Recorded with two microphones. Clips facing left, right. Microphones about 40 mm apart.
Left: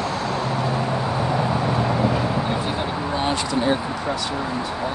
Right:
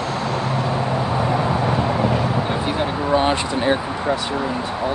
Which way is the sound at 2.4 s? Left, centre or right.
Centre.